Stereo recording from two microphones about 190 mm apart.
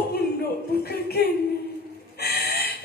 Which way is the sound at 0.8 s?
55° left (ahead or behind).